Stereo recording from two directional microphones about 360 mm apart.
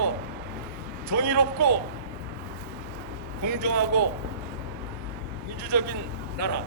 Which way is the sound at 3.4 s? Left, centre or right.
Right.